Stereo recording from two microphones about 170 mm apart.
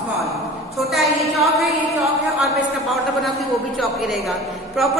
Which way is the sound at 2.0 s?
Centre (ahead or behind).